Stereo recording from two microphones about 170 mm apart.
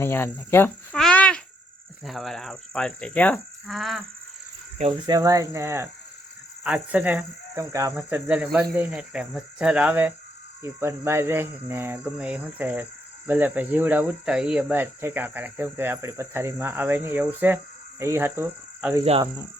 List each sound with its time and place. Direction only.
0.0 s speech: 15° left (ahead or behind)
1.0 s a sound: 5° left (ahead or behind)
2.0 s livestock: centre (ahead or behind)
4.8 s speech: 25° right (ahead or behind); by 18.9 s 10° right (ahead or behind)